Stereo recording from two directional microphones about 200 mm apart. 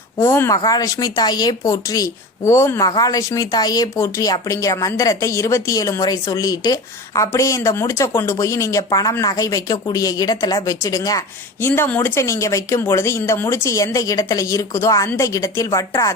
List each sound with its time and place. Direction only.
0.2 s speech: 15° left (ahead or behind)